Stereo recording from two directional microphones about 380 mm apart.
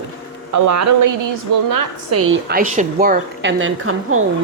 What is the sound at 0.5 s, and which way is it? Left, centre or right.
A woman's voice, right.